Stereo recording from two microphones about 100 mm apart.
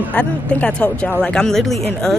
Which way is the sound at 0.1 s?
10° left (ahead or behind).